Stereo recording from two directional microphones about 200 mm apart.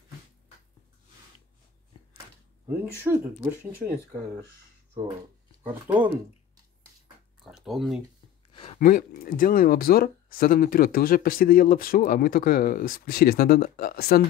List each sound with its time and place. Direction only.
2.8 s speech: 10° right (ahead or behind)
5.6 s speech: 10° right (ahead or behind)
7.4 s speech: centre (ahead or behind)
8.5 s a sound: 25° left (ahead or behind)
8.7 s speech: 40° left (ahead or behind)